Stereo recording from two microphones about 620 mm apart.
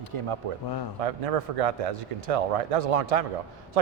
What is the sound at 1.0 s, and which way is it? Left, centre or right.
A man's voice, right.